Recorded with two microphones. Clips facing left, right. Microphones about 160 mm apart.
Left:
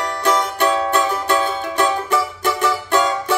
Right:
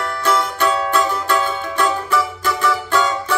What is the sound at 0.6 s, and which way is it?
Music, 20° left (ahead or behind).